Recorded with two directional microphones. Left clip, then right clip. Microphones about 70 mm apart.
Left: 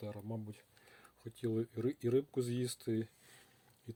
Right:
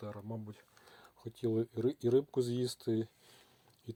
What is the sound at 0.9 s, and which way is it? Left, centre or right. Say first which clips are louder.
Speech: right 4 dB; right.